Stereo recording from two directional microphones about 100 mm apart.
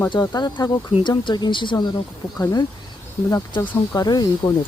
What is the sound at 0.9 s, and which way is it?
Speech, 55° left (ahead or behind).